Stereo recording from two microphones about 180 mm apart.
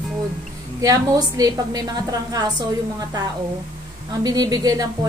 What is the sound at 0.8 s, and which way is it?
A woman's voice, 20° right (ahead or behind).